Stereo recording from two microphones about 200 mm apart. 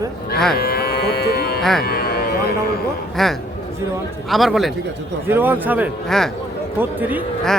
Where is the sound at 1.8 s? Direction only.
50° left (ahead or behind).